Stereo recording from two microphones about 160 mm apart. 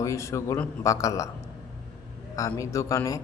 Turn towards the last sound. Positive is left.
turn(degrees=20)  # may be behind; listen again after turning